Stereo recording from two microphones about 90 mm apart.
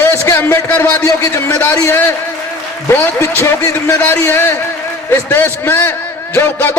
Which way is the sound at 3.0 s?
30° left (ahead or behind).